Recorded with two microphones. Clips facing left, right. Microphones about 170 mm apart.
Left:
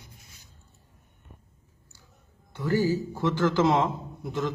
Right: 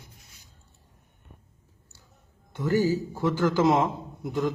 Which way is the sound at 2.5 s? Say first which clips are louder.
Right 1 dB; 15° right (ahead or behind).